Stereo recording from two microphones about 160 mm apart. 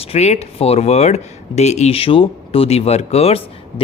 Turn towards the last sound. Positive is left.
turn(degrees=40)  # may be behind; listen again after turning